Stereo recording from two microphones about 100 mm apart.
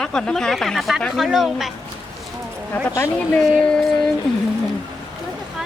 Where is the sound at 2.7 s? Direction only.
20° left (ahead or behind).